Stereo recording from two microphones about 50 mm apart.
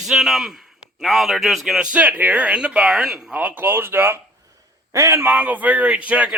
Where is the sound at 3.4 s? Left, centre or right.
Right.